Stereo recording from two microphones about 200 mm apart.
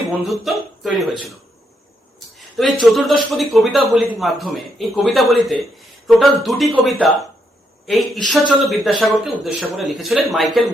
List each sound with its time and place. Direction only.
0.3 s a man's voice: centre (ahead or behind)
2.1 s a sound: centre (ahead or behind)
2.8 s a man's voice: centre (ahead or behind)